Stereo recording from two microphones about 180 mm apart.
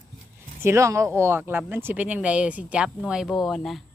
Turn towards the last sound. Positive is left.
turn(degrees=0)  # may be behind; listen again after turning